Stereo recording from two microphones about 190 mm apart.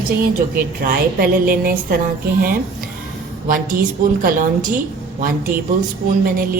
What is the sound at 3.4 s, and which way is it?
A woman's voice, 45° right (ahead or behind).